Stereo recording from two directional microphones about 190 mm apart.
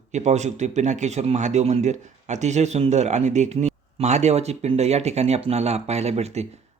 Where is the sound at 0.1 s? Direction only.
40° right (ahead or behind).